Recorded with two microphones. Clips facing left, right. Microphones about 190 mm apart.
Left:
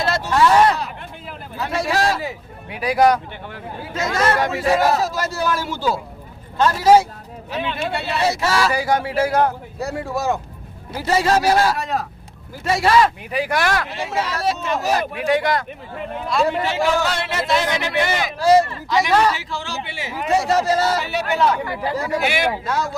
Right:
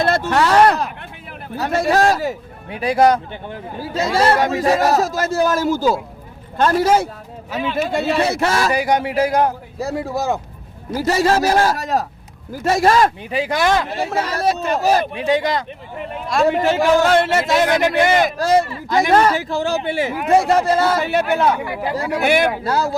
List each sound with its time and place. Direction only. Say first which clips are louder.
0.0 s speech: right 1 dB; 55° right (ahead or behind)
1.5 s speech: right 5 dB; 45° right (ahead or behind)
2.6 s a man's voice: right 2 dB; 25° right (ahead or behind); by 8.7 s 50° right (ahead or behind)
8.7 s a man's voice: right 2 dB; 20° right (ahead or behind)
10.9 s speech: right 2 dB; 40° right (ahead or behind)
13.3 s speech: right 3 dB; 25° right (ahead or behind)
13.9 s a man's voice: right 3 dB; 45° right (ahead or behind)
15.2 s speech: right 1 dB; 20° right (ahead or behind)
16.3 s speech: right 4 dB; 50° right (ahead or behind)
22.6 s a man's voice: right 4 dB; 35° right (ahead or behind)